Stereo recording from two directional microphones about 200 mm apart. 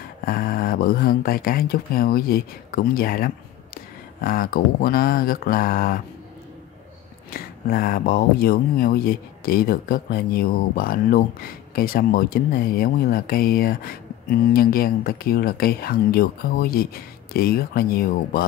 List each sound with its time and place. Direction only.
0.2 s speech: 45° left (ahead or behind)
7.2 s speech: 45° left (ahead or behind)